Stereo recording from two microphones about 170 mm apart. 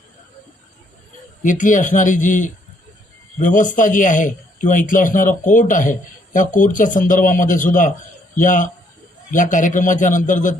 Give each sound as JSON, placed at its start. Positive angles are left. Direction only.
{"t": 1.4, "sound": "a man's voice", "side_deg": 50}